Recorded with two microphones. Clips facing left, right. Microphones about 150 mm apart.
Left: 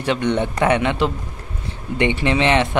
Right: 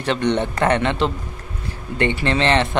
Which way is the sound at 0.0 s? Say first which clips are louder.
Even; 10° left (ahead or behind).